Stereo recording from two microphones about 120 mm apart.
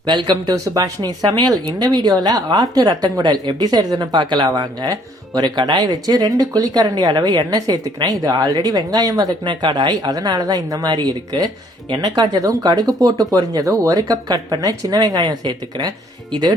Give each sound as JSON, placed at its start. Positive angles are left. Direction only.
{"t": 0.0, "sound": "speech", "side_deg": -40}